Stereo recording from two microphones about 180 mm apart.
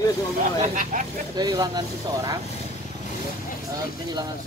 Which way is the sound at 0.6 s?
45° right (ahead or behind).